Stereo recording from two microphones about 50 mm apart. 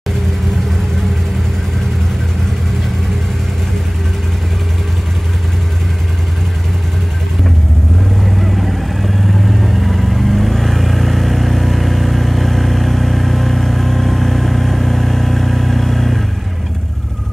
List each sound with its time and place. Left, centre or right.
8.2 s vehicle: centre